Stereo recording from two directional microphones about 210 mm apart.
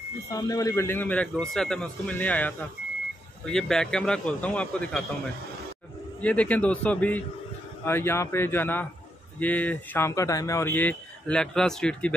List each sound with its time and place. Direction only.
0.3 s a man's voice: 15° left (ahead or behind)